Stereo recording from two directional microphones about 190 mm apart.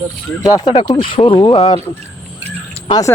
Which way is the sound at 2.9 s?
20° left (ahead or behind).